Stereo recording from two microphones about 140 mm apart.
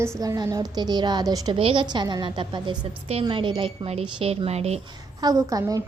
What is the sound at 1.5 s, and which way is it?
A woman's voice, 40° right (ahead or behind).